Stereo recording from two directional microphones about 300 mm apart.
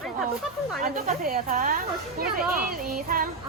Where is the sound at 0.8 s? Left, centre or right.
Right.